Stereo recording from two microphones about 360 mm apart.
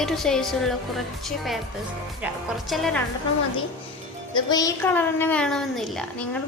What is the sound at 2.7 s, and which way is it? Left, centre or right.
Speech, centre.